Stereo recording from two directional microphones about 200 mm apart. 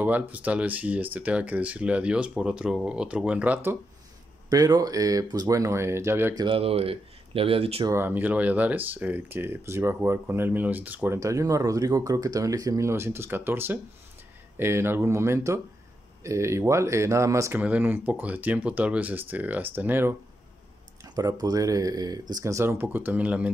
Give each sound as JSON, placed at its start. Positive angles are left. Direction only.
{"t": 0.0, "sound": "speech", "side_deg": -10}
{"t": 6.4, "sound": "speech", "side_deg": -30}
{"t": 7.9, "sound": "speech", "side_deg": -10}